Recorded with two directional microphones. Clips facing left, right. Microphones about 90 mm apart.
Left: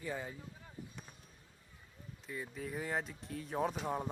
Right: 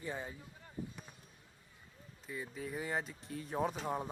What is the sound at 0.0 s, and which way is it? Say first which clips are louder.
Speech: left 1 dB; 20° right (ahead or behind).